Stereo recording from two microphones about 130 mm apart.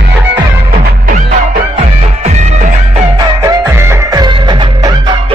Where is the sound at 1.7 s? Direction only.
60° right (ahead or behind).